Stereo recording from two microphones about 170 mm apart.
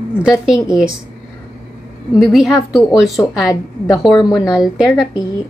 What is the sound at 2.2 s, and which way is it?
A woman's voice, centre (ahead or behind).